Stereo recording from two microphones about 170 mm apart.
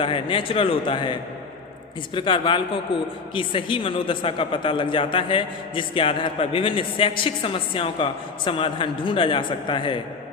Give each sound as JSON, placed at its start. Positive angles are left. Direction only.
{"t": 0.0, "sound": "a woman's voice", "side_deg": 30}